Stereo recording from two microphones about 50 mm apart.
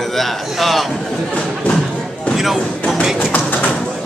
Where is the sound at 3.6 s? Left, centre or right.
Centre.